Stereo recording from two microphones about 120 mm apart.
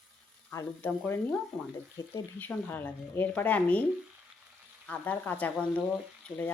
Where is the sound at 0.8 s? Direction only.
15° left (ahead or behind).